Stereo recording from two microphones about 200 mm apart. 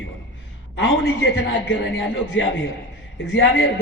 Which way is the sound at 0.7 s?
65° left (ahead or behind).